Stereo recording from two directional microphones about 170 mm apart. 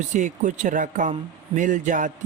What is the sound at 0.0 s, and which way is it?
Speech, 45° right (ahead or behind).